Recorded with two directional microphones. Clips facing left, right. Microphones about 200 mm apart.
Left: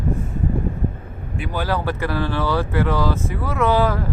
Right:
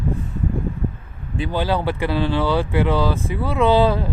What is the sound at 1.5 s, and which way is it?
Speech, 25° right (ahead or behind).